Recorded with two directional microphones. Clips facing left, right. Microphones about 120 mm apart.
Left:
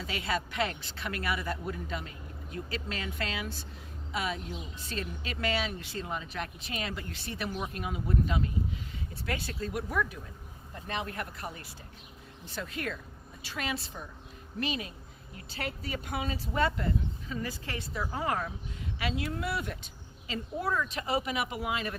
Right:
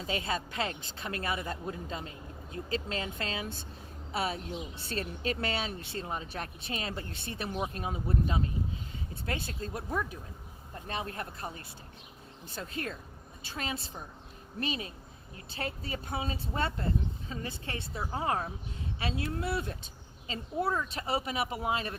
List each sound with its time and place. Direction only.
0.0 s speech: 30° right (ahead or behind)
12.7 s speech: 35° right (ahead or behind)
15.4 s speech: 30° right (ahead or behind)